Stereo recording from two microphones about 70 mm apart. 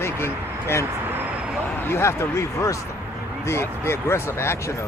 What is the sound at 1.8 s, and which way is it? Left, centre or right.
Speech, left.